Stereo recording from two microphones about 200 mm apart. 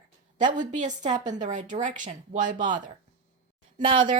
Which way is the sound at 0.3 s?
40° right (ahead or behind).